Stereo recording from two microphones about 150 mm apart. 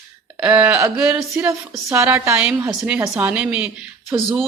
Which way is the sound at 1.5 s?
20° right (ahead or behind).